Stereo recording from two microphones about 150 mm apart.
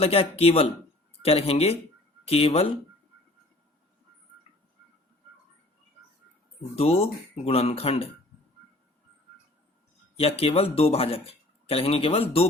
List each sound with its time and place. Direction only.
0.0 s speech: 40° left (ahead or behind)
6.7 s speech: 40° left (ahead or behind)
10.2 s speech: 40° left (ahead or behind)